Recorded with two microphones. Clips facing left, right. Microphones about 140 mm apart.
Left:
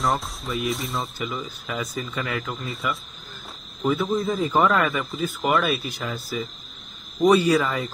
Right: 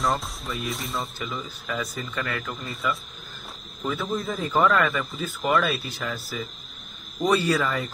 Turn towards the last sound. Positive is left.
turn(degrees=15)  # may be behind; listen again after turning